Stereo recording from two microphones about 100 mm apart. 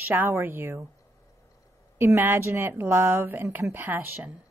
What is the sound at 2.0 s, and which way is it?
A woman's voice, 25° right (ahead or behind).